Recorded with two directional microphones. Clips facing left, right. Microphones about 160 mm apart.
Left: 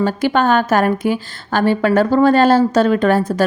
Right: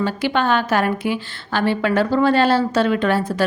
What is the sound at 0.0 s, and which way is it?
A woman's voice, 45° left (ahead or behind).